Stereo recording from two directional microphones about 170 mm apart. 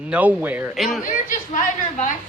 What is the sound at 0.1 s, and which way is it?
Speech, 10° right (ahead or behind).